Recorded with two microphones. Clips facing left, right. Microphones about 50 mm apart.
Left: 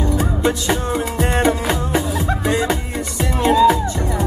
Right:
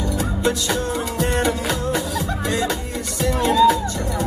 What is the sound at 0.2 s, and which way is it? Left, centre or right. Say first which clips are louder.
Music: left 2 dB; left.